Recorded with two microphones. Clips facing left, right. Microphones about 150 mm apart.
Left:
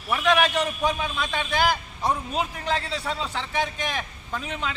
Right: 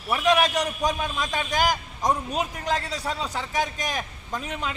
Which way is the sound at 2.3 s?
40° right (ahead or behind).